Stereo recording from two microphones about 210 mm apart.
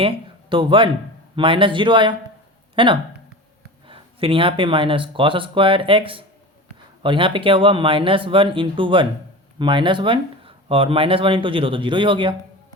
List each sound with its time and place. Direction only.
0.5 s speech: 25° right (ahead or behind)